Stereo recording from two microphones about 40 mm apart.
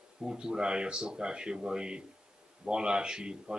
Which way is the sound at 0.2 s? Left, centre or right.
Centre.